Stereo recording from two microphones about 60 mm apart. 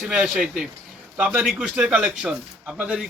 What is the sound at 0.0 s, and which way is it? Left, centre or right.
Speech, centre.